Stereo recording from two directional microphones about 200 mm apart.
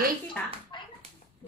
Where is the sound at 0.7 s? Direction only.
25° left (ahead or behind).